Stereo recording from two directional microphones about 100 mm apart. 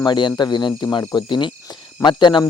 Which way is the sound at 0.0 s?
50° left (ahead or behind).